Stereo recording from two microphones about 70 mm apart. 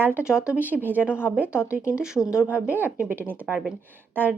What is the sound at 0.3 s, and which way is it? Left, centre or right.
Speech, centre.